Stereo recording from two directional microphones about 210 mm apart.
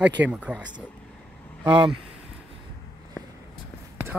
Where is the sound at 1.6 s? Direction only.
20° right (ahead or behind).